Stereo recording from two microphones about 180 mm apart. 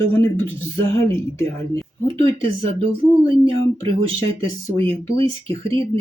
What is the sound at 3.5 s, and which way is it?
Speech, 30° right (ahead or behind).